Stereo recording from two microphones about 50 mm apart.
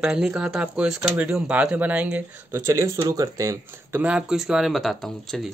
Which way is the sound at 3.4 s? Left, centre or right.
Right.